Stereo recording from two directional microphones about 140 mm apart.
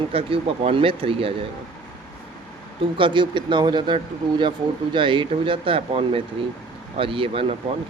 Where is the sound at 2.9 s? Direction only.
35° right (ahead or behind).